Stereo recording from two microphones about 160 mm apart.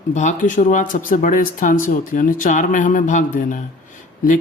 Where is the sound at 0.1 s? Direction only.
50° left (ahead or behind).